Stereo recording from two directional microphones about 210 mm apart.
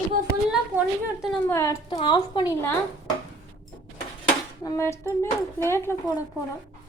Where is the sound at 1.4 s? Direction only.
15° left (ahead or behind).